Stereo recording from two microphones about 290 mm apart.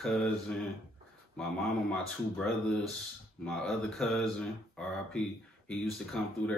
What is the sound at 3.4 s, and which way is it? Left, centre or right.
Speech, centre.